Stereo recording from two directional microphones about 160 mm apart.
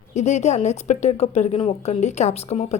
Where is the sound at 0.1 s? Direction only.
45° left (ahead or behind).